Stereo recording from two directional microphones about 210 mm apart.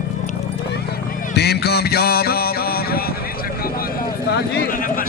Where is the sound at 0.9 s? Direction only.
50° left (ahead or behind).